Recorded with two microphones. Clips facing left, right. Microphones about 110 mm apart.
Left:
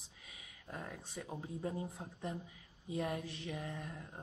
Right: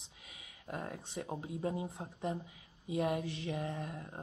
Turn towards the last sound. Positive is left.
turn(degrees=-20)  # may be behind; listen again after turning